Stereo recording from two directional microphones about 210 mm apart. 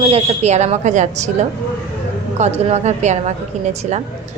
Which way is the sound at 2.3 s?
30° right (ahead or behind).